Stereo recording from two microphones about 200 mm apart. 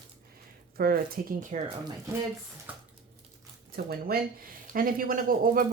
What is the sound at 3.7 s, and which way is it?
Speech, 50° right (ahead or behind).